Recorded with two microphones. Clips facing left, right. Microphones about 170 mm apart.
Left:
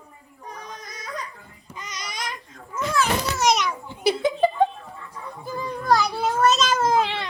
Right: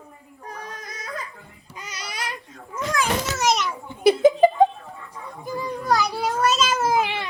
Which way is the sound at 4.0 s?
50° right (ahead or behind).